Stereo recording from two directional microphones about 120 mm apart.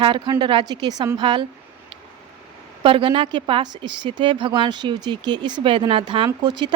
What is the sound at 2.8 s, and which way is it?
A woman's voice, 45° right (ahead or behind).